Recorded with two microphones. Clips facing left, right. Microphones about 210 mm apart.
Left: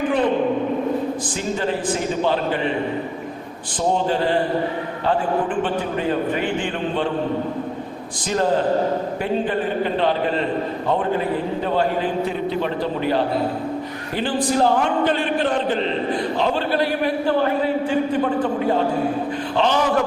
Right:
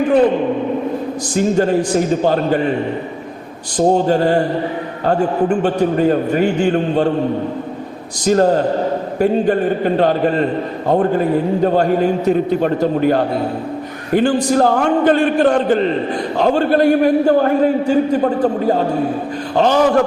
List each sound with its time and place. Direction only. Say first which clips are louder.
1.4 s a man's voice: right 11 dB; 45° right (ahead or behind)
3.8 s a man's voice: right 7 dB; 45° right (ahead or behind)
8.2 s a man's voice: right 7 dB; 45° right (ahead or behind)